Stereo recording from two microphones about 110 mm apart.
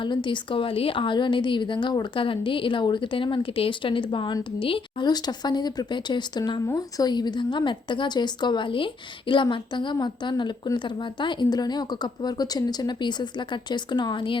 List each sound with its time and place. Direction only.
0.0 s a woman's voice: 45° left (ahead or behind)